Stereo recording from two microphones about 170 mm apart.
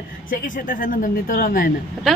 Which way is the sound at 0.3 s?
55° left (ahead or behind).